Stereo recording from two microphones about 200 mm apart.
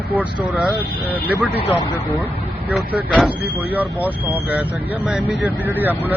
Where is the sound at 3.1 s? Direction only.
5° right (ahead or behind).